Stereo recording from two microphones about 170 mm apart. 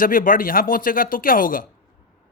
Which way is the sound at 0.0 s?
55° left (ahead or behind).